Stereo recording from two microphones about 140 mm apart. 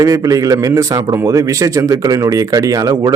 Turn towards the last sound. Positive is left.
turn(degrees=-25)  # may be behind; listen again after turning